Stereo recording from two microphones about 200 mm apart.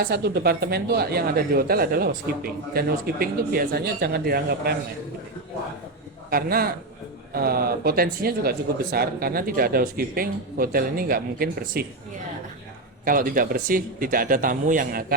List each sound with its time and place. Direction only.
0.0 s speech: 55° right (ahead or behind)
6.3 s speech: 50° right (ahead or behind)
13.1 s speech: 45° right (ahead or behind)